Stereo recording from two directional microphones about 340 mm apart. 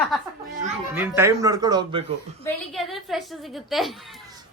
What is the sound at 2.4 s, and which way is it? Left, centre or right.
A woman's voice, centre.